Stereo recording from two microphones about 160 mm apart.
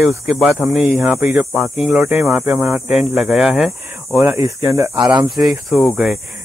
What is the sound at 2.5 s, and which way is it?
Speech, centre (ahead or behind).